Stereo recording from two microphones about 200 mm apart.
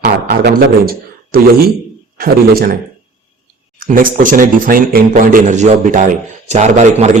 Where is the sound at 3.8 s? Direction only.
45° right (ahead or behind).